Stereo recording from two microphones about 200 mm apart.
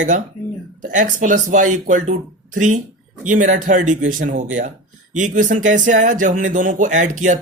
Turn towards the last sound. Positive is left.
turn(degrees=-40)  # may be behind; listen again after turning